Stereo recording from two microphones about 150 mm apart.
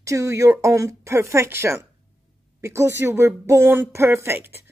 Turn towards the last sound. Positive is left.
turn(degrees=-15)  # may be behind; listen again after turning